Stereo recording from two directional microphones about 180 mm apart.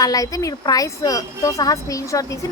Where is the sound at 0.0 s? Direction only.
20° left (ahead or behind).